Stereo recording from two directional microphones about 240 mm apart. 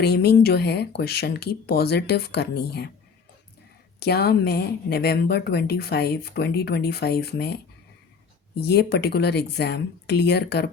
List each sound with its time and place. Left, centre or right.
0.0 s speech: left
4.0 s a woman's voice: left